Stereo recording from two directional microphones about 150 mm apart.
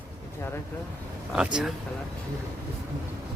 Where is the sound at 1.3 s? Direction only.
5° right (ahead or behind).